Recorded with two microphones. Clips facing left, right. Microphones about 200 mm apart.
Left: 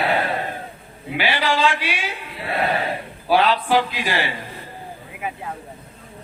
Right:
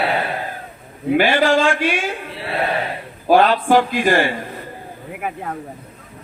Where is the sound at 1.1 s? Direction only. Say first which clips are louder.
Right 7 dB; 50° right (ahead or behind).